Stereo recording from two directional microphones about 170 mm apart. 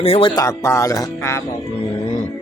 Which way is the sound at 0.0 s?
35° left (ahead or behind).